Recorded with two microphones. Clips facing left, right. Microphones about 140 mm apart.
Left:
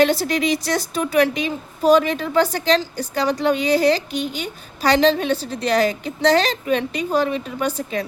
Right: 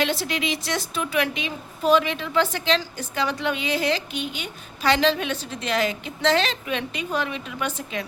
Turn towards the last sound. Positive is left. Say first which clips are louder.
# left 6 dB
turn(degrees=35)  # may be behind; listen again after turning